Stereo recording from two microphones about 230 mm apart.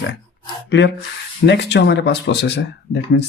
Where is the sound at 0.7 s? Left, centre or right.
Left.